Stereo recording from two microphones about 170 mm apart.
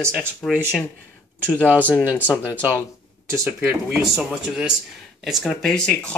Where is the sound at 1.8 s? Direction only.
10° left (ahead or behind).